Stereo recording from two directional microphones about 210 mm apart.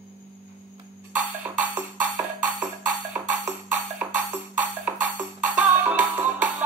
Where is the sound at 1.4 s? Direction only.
10° right (ahead or behind).